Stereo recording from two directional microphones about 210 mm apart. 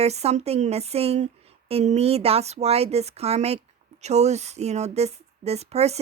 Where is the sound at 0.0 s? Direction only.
30° right (ahead or behind).